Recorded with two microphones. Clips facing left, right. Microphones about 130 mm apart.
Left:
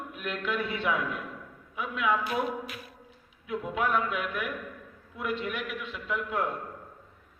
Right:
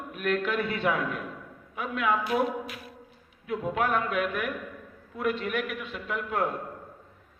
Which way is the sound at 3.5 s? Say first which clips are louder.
Right 2 dB; 55° right (ahead or behind).